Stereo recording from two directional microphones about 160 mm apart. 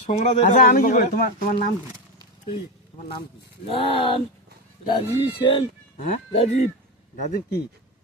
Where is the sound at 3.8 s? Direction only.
35° left (ahead or behind).